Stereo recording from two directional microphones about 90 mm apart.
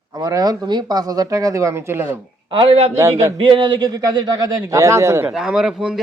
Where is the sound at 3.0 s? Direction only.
30° right (ahead or behind).